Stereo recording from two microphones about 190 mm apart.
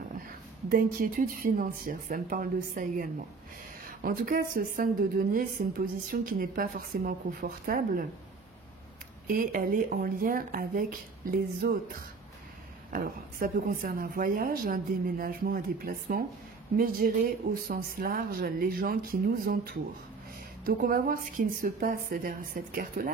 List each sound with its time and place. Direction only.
0.7 s a woman's voice: 45° right (ahead or behind)
9.3 s a woman's voice: 50° right (ahead or behind)